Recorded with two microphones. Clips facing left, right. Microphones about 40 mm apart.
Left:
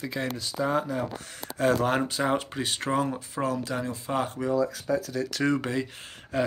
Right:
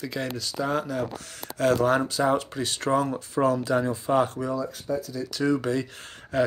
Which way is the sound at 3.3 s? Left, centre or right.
Centre.